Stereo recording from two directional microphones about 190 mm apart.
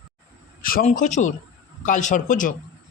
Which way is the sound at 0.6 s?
45° left (ahead or behind).